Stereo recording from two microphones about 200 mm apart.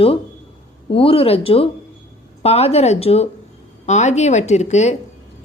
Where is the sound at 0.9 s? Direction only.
30° left (ahead or behind).